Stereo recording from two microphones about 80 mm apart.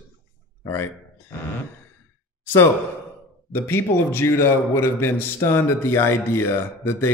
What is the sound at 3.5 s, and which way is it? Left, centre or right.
A man's voice, left.